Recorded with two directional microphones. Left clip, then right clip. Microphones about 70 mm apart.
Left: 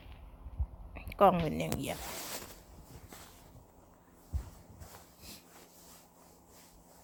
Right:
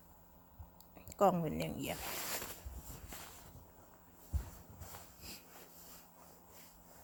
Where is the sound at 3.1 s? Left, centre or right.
Right.